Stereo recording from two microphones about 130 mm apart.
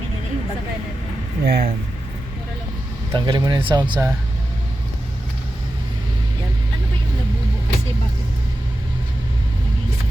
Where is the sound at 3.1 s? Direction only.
35° right (ahead or behind).